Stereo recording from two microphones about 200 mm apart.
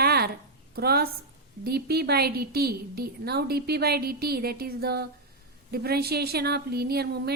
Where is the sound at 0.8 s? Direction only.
50° right (ahead or behind).